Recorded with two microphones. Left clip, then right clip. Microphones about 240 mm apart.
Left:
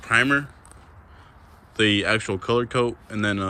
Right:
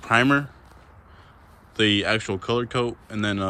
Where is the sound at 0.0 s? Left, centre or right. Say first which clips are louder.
Even; centre.